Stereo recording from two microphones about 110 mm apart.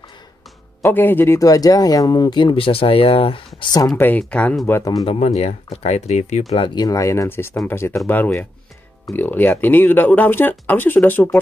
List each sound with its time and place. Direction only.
0.8 s speech: 20° left (ahead or behind); by 3.4 s 55° left (ahead or behind)
3.7 s speech: 35° left (ahead or behind)
4.2 s speech: 10° left (ahead or behind)
4.6 s speech: 25° left (ahead or behind)
5.0 s speech: 70° left (ahead or behind); by 6.4 s 90° left
6.7 s speech: 35° left (ahead or behind)
9.1 s speech: 15° left (ahead or behind)